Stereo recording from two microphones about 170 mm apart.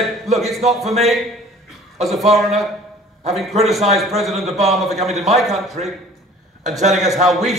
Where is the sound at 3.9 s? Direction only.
Centre (ahead or behind).